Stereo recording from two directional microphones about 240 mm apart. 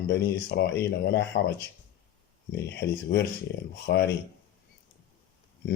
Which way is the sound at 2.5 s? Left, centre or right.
Left.